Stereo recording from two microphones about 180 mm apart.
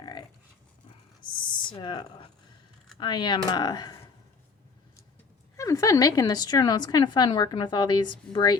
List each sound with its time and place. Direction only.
0.0 s dog: 25° left (ahead or behind)
1.2 s a sound: 25° left (ahead or behind)
3.0 s a woman's voice: 25° left (ahead or behind)
5.5 s a woman's voice: 15° left (ahead or behind)